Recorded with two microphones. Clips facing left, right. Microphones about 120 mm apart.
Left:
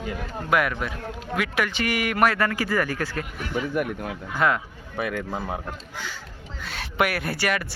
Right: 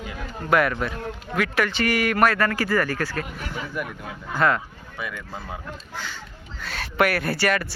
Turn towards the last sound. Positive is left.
turn(degrees=15)  # may be behind; listen again after turning